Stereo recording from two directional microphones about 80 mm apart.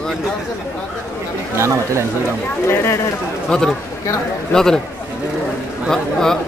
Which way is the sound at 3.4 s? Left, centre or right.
Centre.